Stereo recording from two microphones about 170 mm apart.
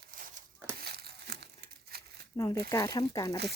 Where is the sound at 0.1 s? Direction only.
55° right (ahead or behind); by 2.2 s 70° right (ahead or behind).